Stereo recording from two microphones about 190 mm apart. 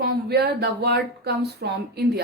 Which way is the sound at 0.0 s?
55° right (ahead or behind).